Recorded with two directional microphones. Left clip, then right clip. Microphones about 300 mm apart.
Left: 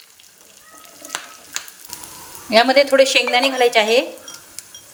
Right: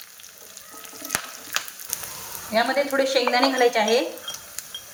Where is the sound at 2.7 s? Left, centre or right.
Left.